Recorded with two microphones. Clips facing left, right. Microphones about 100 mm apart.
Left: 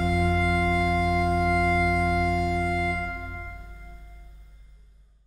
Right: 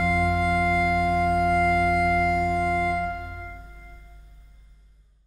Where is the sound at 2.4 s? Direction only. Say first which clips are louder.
Right 3 dB; 45° right (ahead or behind).